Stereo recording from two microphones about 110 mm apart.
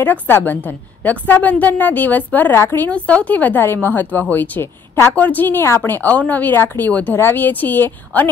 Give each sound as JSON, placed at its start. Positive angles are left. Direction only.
{"t": 0.0, "sound": "a woman's voice", "side_deg": 15}